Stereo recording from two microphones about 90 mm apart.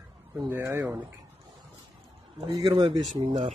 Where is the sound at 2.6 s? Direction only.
65° right (ahead or behind).